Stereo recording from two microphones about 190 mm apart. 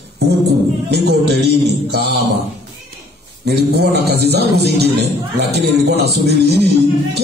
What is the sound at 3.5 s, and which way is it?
A man's voice, 60° right (ahead or behind).